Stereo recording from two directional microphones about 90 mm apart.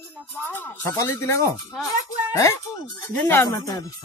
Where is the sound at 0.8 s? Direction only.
35° left (ahead or behind).